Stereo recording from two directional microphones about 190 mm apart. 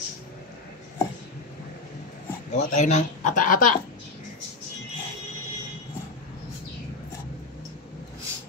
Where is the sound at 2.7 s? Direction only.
40° left (ahead or behind).